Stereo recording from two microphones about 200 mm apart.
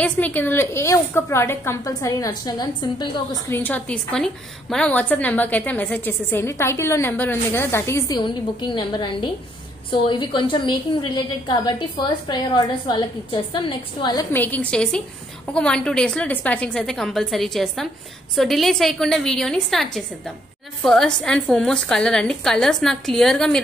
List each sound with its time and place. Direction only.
0.0 s a woman's voice: 10° left (ahead or behind)
3.4 s a woman's voice: 10° left (ahead or behind)
14.3 s a woman's voice: 10° left (ahead or behind)